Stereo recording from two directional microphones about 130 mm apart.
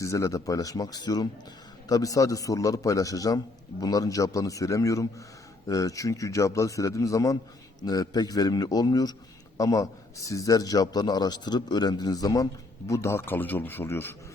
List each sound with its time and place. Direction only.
0.0 s a man's voice: 25° left (ahead or behind)